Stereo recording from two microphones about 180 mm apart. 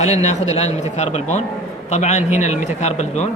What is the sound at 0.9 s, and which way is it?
A man's voice, 40° left (ahead or behind).